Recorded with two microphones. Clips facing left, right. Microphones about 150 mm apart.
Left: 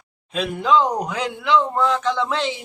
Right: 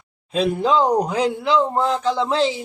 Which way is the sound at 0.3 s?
35° right (ahead or behind).